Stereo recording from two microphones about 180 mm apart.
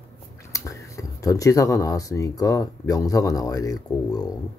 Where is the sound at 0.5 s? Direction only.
15° left (ahead or behind).